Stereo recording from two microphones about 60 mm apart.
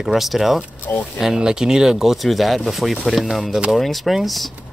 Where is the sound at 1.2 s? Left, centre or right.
Centre.